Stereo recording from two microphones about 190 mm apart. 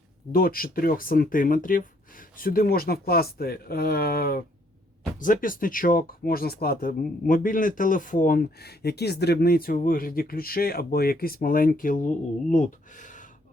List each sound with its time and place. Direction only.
0.3 s speech: 50° left (ahead or behind)